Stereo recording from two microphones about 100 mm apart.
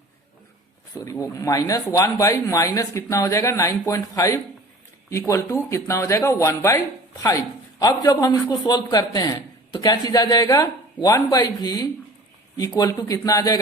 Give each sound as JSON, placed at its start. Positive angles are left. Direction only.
{"t": 0.9, "sound": "speech", "side_deg": 30}